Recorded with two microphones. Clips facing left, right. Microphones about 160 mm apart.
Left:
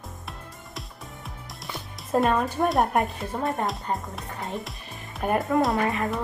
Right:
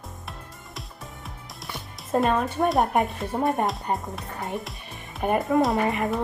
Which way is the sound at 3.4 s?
20° right (ahead or behind).